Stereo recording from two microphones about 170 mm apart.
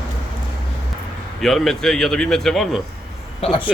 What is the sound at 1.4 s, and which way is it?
Speech, centre (ahead or behind).